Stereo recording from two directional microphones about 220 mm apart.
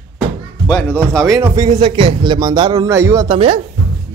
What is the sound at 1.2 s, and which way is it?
A man's voice, 20° right (ahead or behind).